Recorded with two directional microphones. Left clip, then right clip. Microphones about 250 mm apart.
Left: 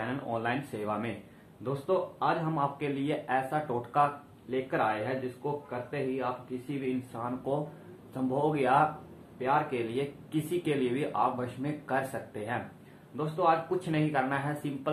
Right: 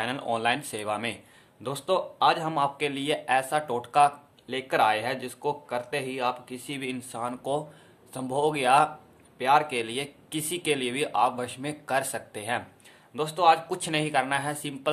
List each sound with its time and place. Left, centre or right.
0.0 s speech: right